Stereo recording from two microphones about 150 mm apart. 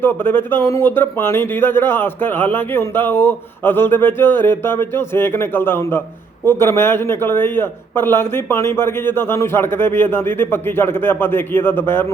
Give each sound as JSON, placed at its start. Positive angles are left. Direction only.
{"t": 0.0, "sound": "speech", "side_deg": 15}